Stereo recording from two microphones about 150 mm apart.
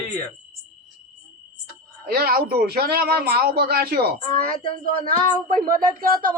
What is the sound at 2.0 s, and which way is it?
Speech, 90° right.